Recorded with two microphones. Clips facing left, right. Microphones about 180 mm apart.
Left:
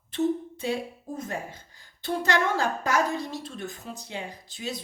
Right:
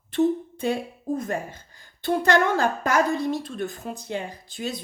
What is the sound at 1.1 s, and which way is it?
A woman's voice, 60° right (ahead or behind).